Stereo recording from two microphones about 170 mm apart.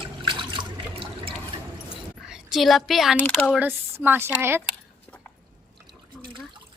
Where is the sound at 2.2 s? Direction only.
Centre (ahead or behind).